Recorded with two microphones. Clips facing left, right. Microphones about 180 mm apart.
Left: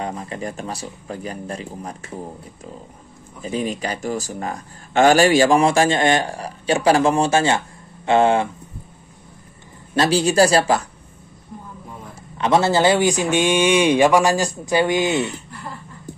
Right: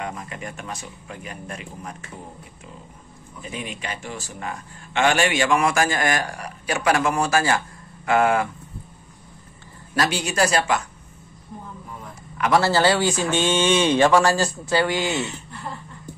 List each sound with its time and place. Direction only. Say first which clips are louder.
0.0 s a man's voice: left 5 dB; 35° left (ahead or behind)
3.4 s speech: left 8 dB; 35° left (ahead or behind)
9.9 s a man's voice: left 7 dB; 30° left (ahead or behind)
12.4 s speech: left 2 dB; 25° left (ahead or behind)